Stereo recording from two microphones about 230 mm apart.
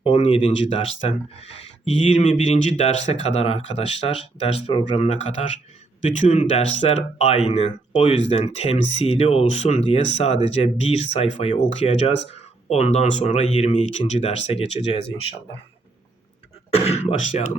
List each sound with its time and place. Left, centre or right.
0.0 s speech: left
16.7 s speech: left